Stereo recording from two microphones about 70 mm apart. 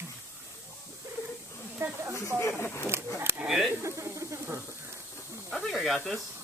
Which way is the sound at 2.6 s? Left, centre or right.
Left.